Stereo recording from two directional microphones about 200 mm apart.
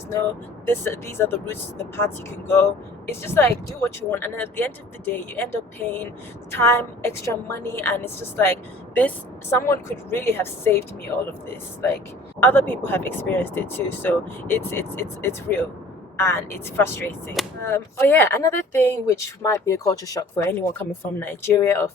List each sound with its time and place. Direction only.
0.6 s speech: 10° left (ahead or behind)
12.4 s speech: 10° left (ahead or behind)